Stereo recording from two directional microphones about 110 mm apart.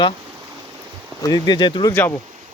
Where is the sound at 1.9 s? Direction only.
15° left (ahead or behind).